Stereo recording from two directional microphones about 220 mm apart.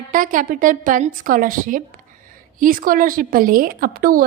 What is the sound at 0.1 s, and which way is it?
A woman's voice, 35° right (ahead or behind).